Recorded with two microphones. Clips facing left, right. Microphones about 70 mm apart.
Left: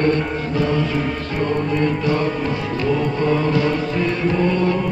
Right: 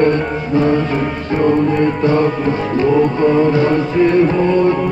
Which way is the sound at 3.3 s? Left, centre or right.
Right.